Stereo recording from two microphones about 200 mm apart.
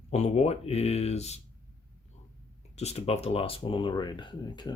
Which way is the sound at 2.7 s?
30° left (ahead or behind).